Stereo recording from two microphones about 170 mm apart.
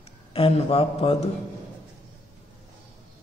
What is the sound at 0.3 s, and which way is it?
A man's voice, 35° left (ahead or behind).